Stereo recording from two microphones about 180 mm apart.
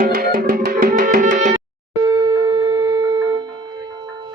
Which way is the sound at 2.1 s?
20° right (ahead or behind).